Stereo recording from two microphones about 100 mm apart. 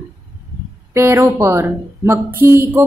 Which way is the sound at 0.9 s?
25° right (ahead or behind).